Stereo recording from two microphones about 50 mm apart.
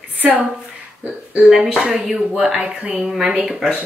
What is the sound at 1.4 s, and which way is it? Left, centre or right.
Speech, centre.